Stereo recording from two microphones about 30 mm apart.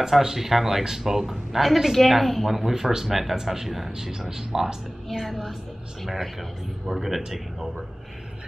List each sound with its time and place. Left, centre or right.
0.0 s speech: centre
2.7 s speech: centre
5.2 s speech: centre